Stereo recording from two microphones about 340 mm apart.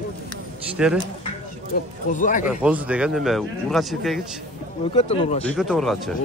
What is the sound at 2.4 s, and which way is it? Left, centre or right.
A man's voice, centre.